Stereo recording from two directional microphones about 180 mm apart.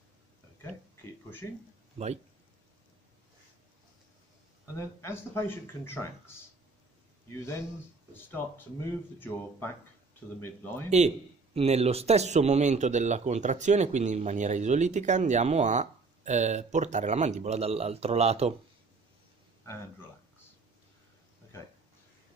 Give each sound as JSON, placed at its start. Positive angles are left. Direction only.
{"t": 4.7, "sound": "speech", "side_deg": 15}
{"t": 8.1, "sound": "speech", "side_deg": 10}
{"t": 10.9, "sound": "a man's voice", "side_deg": -40}